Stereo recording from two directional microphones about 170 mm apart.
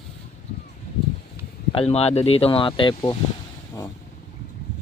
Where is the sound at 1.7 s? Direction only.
35° left (ahead or behind).